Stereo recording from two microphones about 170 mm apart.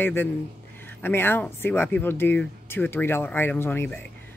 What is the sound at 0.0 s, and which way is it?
Speech, 10° left (ahead or behind).